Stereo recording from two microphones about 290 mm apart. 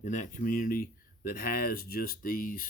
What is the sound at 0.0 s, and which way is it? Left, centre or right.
Speech, left.